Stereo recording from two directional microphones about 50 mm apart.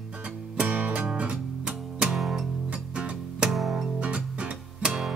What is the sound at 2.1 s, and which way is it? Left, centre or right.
Music, centre.